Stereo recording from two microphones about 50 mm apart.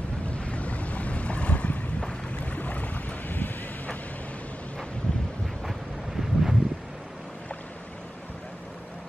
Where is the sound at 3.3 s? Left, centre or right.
Left.